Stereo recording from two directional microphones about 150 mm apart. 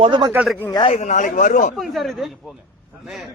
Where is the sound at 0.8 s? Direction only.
50° left (ahead or behind).